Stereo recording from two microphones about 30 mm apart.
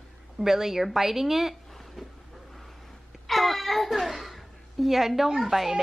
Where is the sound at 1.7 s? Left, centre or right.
Centre.